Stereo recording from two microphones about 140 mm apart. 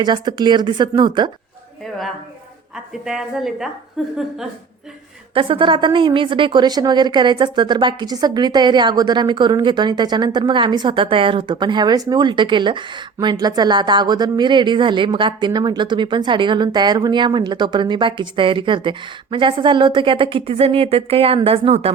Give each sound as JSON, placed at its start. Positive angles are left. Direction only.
{"t": 0.0, "sound": "a woman's voice", "side_deg": -30}
{"t": 2.7, "sound": "a woman's voice", "side_deg": -5}
{"t": 5.3, "sound": "a woman's voice", "side_deg": -40}